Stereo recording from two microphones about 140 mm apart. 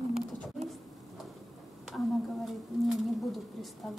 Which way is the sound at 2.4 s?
Centre (ahead or behind).